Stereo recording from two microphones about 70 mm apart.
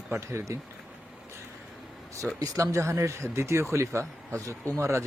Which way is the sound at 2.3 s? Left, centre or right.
Right.